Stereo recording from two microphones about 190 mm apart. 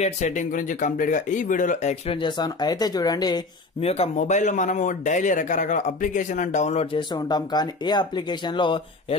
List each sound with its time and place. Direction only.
0.0 s a man's voice: 40° left (ahead or behind); by 3.4 s 20° left (ahead or behind)
3.8 s a man's voice: 30° left (ahead or behind)